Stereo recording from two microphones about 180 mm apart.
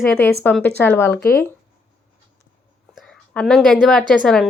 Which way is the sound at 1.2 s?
60° left (ahead or behind).